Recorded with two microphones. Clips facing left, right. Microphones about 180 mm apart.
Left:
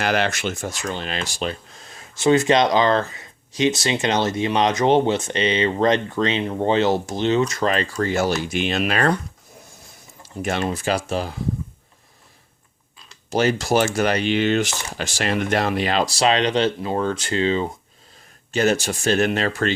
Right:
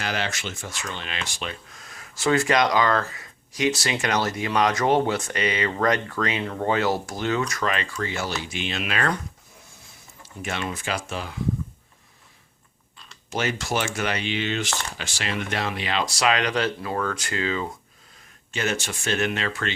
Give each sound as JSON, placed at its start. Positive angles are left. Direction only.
{"t": 0.0, "sound": "speech", "side_deg": 60}
{"t": 10.2, "sound": "speech", "side_deg": 40}
{"t": 13.3, "sound": "speech", "side_deg": 35}